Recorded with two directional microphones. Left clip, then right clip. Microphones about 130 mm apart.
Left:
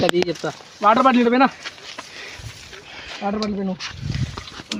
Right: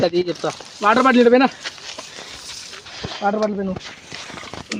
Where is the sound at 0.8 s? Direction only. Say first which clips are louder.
Right 1 dB; 30° right (ahead or behind).